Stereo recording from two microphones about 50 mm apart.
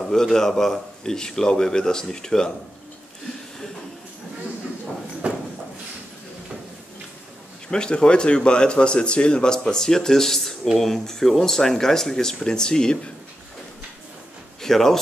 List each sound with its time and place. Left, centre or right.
0.0 s speech: centre
5.2 s a sound: right
7.7 s speech: centre
14.6 s speech: centre